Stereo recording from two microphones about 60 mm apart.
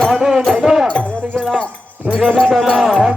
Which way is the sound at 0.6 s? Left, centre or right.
Centre.